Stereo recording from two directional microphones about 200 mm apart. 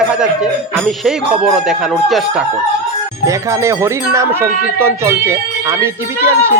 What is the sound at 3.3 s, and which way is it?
Speech, 15° right (ahead or behind).